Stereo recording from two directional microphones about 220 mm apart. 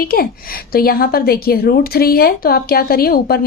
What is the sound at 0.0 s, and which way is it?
A woman's voice, 40° left (ahead or behind).